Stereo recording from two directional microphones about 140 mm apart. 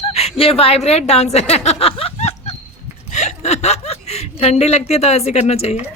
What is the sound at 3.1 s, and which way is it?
Chuckle, 55° left (ahead or behind).